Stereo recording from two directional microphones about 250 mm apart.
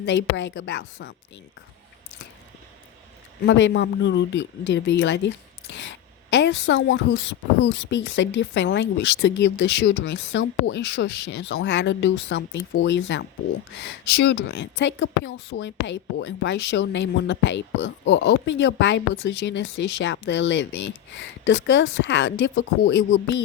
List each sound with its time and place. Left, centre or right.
0.0 s speech: left
3.4 s speech: left